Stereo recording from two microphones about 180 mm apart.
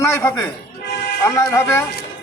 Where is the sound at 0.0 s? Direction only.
15° left (ahead or behind).